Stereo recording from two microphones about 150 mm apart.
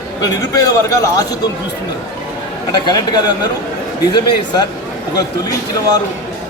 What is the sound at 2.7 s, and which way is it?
Speech, 25° left (ahead or behind).